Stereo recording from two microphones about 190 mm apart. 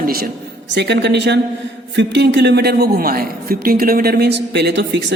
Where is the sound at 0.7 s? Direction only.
65° right (ahead or behind).